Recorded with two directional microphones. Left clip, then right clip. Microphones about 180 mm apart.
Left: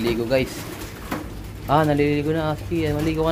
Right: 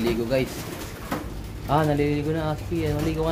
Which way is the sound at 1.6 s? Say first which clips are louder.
Left 4 dB; 20° left (ahead or behind).